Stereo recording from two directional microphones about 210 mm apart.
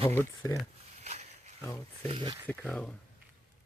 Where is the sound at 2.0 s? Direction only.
25° right (ahead or behind).